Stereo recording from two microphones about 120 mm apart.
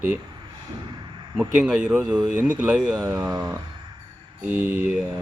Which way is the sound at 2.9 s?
30° right (ahead or behind).